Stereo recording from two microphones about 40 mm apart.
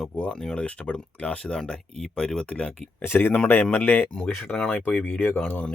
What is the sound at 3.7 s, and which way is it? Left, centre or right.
Speech, left.